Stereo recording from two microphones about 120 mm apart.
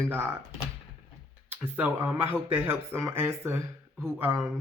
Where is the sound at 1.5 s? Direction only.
15° right (ahead or behind).